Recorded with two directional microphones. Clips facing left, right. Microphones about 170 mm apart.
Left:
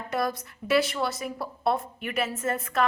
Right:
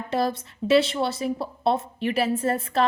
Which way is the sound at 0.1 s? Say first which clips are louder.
Right 4 dB; 25° right (ahead or behind).